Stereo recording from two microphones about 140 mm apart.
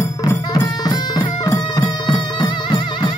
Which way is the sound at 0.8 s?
30° left (ahead or behind).